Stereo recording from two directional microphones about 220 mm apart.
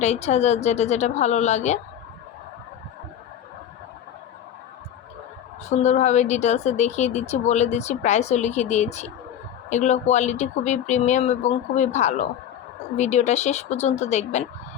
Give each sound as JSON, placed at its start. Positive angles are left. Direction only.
{"t": 0.0, "sound": "a woman's voice", "side_deg": 30}
{"t": 5.6, "sound": "a woman's voice", "side_deg": 30}